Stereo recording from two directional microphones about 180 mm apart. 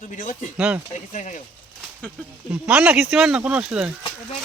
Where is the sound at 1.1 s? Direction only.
40° left (ahead or behind).